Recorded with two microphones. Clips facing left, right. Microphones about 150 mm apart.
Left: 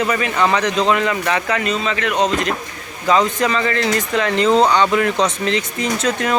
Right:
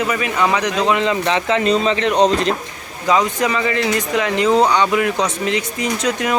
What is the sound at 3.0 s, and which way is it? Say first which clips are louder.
Speech: left 1 dB; 10° right (ahead or behind).